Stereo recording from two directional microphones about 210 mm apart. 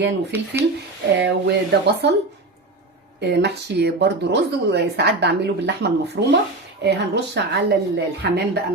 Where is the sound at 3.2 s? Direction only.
55° right (ahead or behind).